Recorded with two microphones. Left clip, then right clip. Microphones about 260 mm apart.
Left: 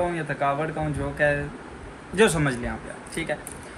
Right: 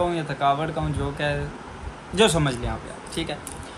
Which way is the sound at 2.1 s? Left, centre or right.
Centre.